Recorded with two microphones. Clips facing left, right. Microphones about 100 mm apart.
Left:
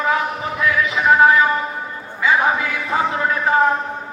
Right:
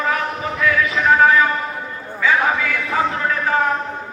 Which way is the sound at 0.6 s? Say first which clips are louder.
Even; 15° left (ahead or behind).